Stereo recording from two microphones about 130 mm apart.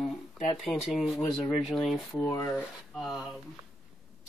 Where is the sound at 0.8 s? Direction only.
Centre (ahead or behind).